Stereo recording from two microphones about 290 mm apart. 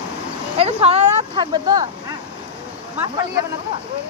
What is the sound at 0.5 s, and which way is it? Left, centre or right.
Speech, right.